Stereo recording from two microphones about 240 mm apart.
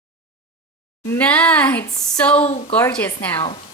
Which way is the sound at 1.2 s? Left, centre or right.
Centre.